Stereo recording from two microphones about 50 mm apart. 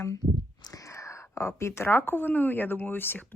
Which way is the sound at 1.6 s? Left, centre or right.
Left.